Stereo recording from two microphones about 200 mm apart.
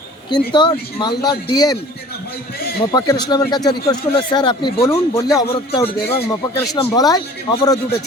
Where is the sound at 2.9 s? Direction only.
20° left (ahead or behind).